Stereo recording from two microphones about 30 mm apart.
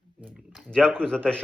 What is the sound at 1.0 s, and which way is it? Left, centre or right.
Speech, left.